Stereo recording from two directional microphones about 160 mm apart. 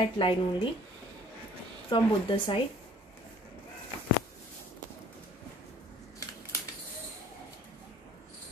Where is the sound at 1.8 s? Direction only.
30° left (ahead or behind).